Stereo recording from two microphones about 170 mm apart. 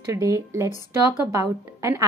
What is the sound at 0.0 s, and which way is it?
A woman's voice, 20° right (ahead or behind).